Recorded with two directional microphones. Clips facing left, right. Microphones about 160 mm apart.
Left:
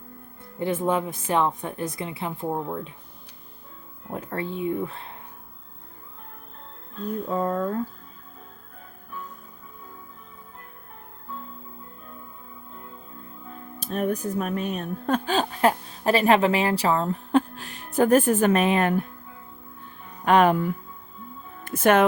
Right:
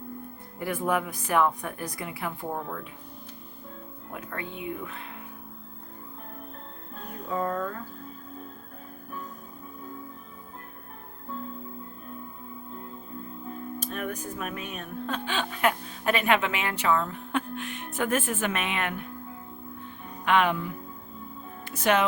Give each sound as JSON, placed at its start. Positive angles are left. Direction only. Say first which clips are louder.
{"t": 0.6, "sound": "a woman's voice", "louder": "left 4 dB", "side_deg": 25}
{"t": 4.1, "sound": "speech", "louder": "left 7 dB", "side_deg": 35}
{"t": 7.3, "sound": "a woman's voice", "louder": "left 3 dB", "side_deg": 25}
{"t": 13.9, "sound": "speech", "louder": "left 11 dB", "side_deg": 40}
{"t": 20.2, "sound": "a woman's voice", "louder": "left 6 dB", "side_deg": 40}